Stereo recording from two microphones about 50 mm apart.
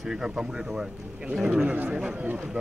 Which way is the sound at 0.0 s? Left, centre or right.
Centre.